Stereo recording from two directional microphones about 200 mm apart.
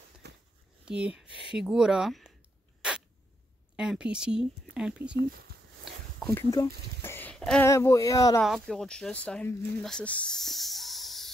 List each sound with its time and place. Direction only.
0.2 s a sound: 55° right (ahead or behind)
0.8 s speech: 5° right (ahead or behind)
3.7 s speech: 5° right (ahead or behind)
5.9 s a sound: centre (ahead or behind)
6.3 s speech: 15° left (ahead or behind)
7.6 s speech: 15° left (ahead or behind)
8.4 s speech: centre (ahead or behind)